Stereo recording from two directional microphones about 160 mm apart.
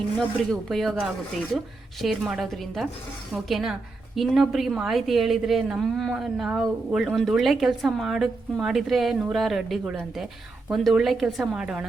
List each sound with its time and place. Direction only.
0.2 s a woman's voice: centre (ahead or behind)